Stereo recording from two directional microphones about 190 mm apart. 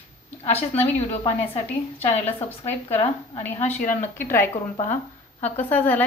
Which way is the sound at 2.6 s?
35° left (ahead or behind).